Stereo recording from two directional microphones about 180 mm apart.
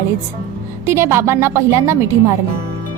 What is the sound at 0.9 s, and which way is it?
Speech, 15° right (ahead or behind).